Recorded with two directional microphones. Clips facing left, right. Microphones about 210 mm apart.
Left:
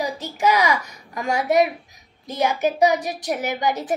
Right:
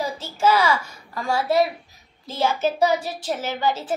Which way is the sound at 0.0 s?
15° left (ahead or behind).